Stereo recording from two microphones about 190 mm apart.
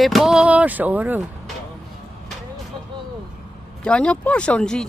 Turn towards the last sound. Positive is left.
turn(degrees=5)  # may be behind; listen again after turning